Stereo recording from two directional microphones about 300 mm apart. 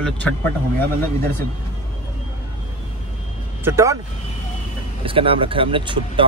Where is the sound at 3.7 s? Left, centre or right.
Centre.